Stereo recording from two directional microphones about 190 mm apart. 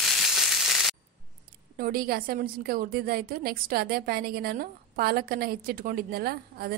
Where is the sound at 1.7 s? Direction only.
50° right (ahead or behind).